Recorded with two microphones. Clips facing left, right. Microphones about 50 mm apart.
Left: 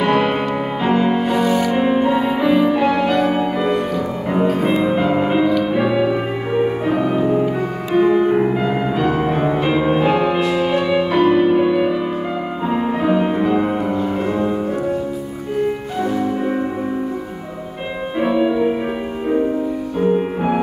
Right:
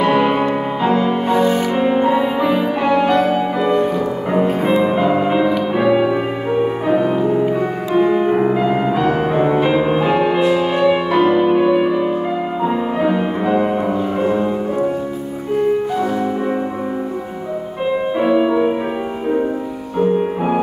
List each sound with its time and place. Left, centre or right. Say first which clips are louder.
0.0 s music: right 2 dB; centre
1.3 s music: right 1 dB; right
1.8 s music: right 1 dB; centre
2.5 s music: left 1 dB; centre
4.5 s music: even; right
4.8 s music: right 1 dB; centre
7.9 s music: left 1 dB; centre
18.2 s music: right 1 dB; centre